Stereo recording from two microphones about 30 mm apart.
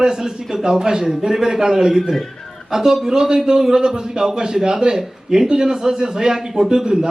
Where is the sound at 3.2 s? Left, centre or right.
Right.